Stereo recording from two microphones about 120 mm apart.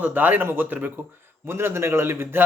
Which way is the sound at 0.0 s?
15° right (ahead or behind).